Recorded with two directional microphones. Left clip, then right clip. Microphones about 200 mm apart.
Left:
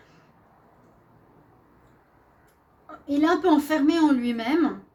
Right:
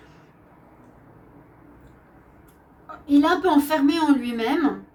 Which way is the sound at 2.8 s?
35° left (ahead or behind).